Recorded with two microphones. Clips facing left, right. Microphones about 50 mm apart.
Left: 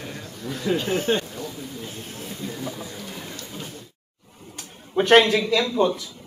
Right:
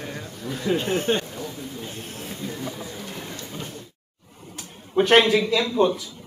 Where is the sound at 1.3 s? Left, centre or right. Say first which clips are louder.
Even; centre.